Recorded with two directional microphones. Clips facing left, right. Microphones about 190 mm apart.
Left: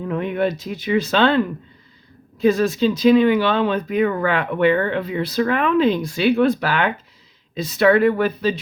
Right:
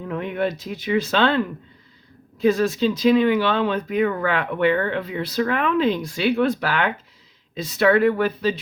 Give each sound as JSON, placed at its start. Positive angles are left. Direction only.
{"t": 0.1, "sound": "speech", "side_deg": 20}
{"t": 2.4, "sound": "speech", "side_deg": 20}